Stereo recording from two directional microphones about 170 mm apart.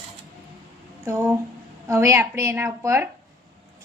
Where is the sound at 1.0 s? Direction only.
15° right (ahead or behind).